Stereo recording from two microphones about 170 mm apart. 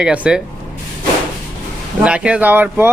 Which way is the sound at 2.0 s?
5° right (ahead or behind).